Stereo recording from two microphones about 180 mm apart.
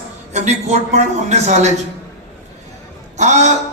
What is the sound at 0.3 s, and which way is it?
Speech, 40° right (ahead or behind).